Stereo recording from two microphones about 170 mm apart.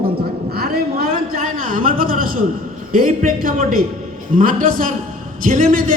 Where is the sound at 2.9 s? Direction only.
55° right (ahead or behind).